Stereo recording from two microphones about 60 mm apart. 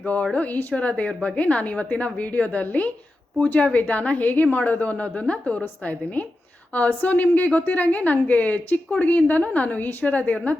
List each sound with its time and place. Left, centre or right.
0.0 s a woman's voice: left